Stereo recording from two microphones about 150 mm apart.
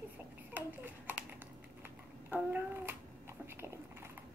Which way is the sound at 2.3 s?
15° right (ahead or behind).